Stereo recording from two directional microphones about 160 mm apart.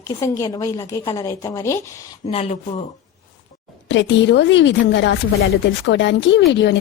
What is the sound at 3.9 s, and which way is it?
Speech, 90° left.